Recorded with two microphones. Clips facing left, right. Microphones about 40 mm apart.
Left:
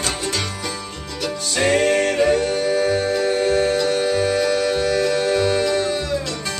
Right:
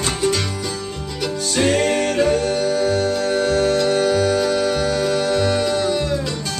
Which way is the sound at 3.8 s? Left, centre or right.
Centre.